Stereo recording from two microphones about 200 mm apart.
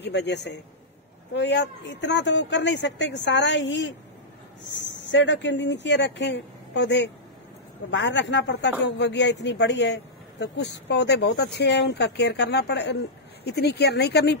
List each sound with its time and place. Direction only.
0.0 s speech: 60° left (ahead or behind)